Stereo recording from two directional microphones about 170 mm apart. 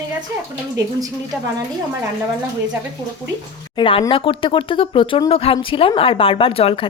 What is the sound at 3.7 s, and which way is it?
A woman's voice, 30° left (ahead or behind).